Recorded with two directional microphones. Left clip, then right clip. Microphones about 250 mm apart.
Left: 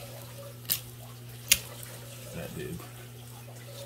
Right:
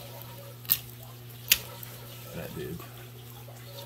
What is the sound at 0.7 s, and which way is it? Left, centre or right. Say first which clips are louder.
Bathtub: even; centre.